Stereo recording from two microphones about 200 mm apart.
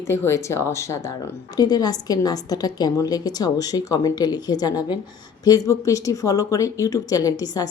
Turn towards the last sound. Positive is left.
turn(degrees=20)  # may be behind; listen again after turning